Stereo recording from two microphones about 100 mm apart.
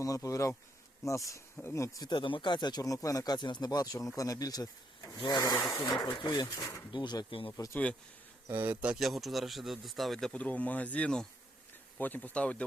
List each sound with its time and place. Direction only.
0.0 s speech: 35° left (ahead or behind)
7.3 s speech: 60° left (ahead or behind)
7.5 s speech: 30° left (ahead or behind)
8.4 s speech: 25° right (ahead or behind)
8.9 s speech: centre (ahead or behind)